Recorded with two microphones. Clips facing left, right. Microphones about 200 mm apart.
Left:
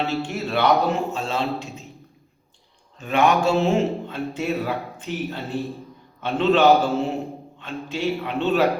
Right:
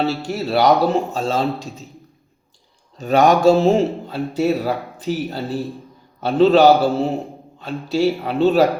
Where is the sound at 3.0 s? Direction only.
40° right (ahead or behind).